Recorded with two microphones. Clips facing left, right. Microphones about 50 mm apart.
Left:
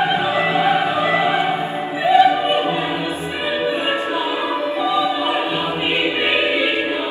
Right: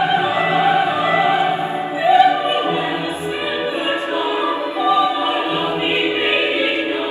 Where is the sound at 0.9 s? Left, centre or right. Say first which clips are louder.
Right 1 dB; right.